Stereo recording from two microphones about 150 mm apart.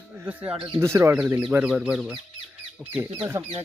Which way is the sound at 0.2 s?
10° right (ahead or behind).